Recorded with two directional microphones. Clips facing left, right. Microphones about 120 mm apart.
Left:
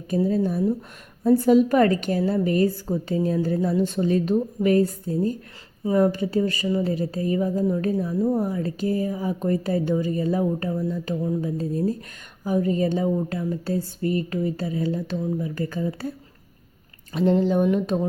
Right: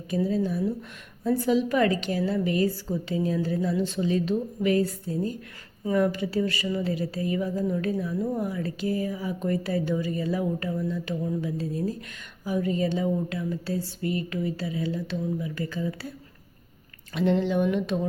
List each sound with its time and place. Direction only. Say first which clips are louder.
0.3 s a woman's voice: left 5 dB; 45° left (ahead or behind)